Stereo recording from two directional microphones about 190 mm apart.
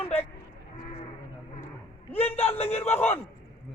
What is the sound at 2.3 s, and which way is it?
Speech, 30° left (ahead or behind).